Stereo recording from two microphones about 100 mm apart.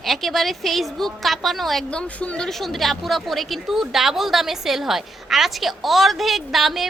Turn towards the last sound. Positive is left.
turn(degrees=0)  # may be behind; listen again after turning